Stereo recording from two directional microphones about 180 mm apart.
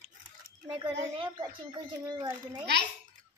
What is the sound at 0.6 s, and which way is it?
Speech, 25° right (ahead or behind).